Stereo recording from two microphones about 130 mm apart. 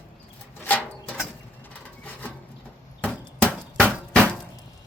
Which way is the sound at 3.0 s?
10° left (ahead or behind).